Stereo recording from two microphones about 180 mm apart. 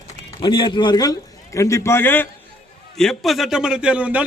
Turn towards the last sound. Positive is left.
turn(degrees=-5)  # may be behind; listen again after turning